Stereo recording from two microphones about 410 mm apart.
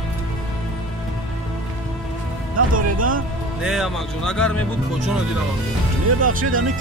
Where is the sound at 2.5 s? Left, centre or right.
Centre.